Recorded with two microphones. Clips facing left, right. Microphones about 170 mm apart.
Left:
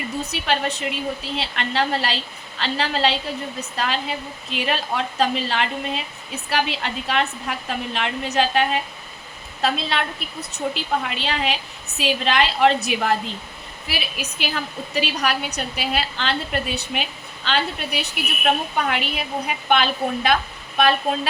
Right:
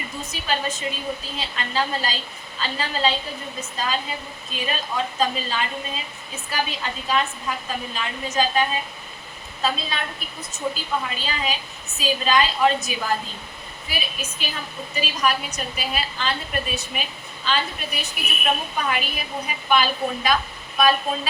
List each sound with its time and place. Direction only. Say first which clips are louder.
0.2 s a woman's voice: left 3 dB; 65° left (ahead or behind)